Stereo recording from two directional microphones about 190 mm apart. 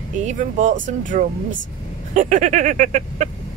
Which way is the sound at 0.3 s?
40° right (ahead or behind).